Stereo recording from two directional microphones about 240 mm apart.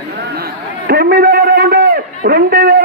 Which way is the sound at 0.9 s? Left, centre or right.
Right.